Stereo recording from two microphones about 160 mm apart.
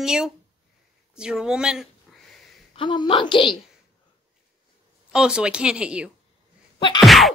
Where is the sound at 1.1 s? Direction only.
5° right (ahead or behind).